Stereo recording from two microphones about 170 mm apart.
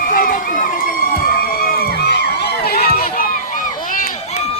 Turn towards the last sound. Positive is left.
turn(degrees=55)  # may be behind; listen again after turning